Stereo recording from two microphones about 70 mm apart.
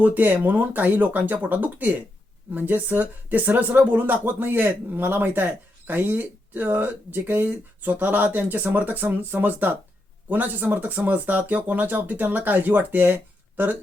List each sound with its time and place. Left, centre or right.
0.0 s speech: right